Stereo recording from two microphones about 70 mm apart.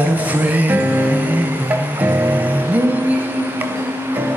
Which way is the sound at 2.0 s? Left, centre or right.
Right.